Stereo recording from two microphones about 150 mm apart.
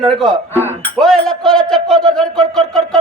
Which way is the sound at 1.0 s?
5° left (ahead or behind).